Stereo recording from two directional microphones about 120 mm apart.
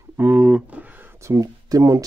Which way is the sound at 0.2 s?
15° right (ahead or behind).